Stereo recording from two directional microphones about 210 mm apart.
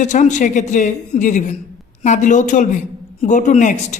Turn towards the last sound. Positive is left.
turn(degrees=35)  # may be behind; listen again after turning